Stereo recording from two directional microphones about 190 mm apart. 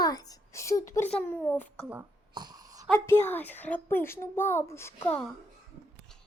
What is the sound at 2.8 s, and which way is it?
A child's voice, 10° left (ahead or behind).